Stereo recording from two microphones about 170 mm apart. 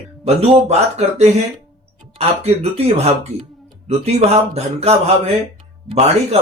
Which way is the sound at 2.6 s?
40° right (ahead or behind).